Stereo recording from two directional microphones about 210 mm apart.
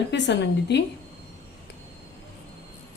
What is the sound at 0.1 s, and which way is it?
Speech, 55° left (ahead or behind).